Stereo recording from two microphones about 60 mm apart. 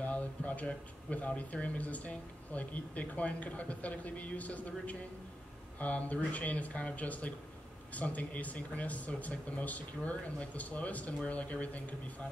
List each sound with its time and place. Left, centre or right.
0.0 s speech: left